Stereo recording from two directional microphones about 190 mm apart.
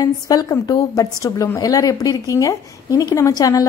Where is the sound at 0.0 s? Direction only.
20° left (ahead or behind).